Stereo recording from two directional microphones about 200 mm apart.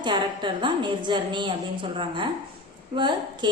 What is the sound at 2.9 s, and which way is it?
Speech, 20° right (ahead or behind).